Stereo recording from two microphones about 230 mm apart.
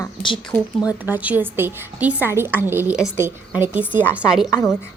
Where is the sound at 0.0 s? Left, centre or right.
Left.